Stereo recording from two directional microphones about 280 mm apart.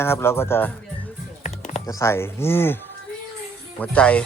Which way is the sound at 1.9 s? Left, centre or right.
Centre.